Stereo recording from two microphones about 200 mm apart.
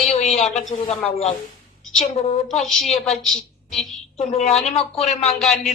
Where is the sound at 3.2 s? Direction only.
Centre (ahead or behind).